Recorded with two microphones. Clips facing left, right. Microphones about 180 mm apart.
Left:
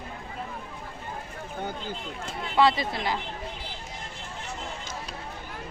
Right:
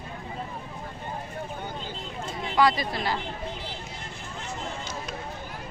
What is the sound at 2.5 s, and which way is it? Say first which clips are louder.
Speech: left 1 dB; 25° left (ahead or behind).